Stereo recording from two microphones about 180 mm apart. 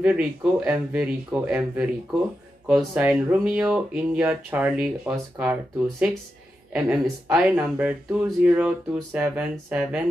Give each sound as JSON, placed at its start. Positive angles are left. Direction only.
{"t": 0.0, "sound": "speech", "side_deg": -5}